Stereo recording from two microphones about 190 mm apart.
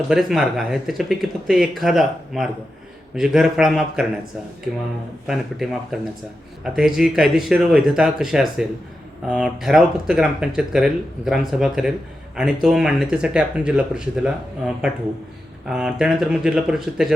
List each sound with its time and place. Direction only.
0.1 s speech: centre (ahead or behind)
5.2 s speech: centre (ahead or behind)